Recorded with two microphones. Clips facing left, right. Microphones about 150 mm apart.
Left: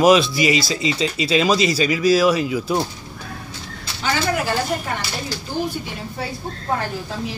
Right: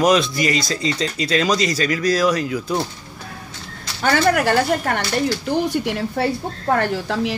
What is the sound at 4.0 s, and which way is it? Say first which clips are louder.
A woman's voice: right 5 dB; 60° right (ahead or behind).